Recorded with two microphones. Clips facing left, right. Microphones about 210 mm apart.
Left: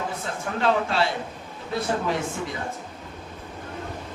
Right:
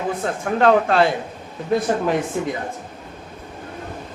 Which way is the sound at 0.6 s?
55° right (ahead or behind).